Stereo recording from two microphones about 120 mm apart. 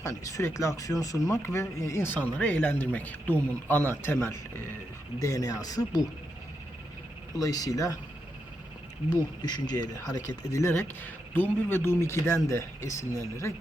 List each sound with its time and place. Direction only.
0.0 s speech: 25° left (ahead or behind)
7.3 s speech: 30° left (ahead or behind)
9.0 s speech: 35° left (ahead or behind); by 12.6 s 20° left (ahead or behind)